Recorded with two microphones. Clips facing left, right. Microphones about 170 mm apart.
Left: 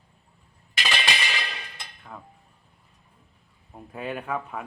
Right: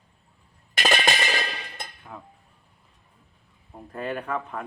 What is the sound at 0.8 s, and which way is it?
Music, 50° right (ahead or behind).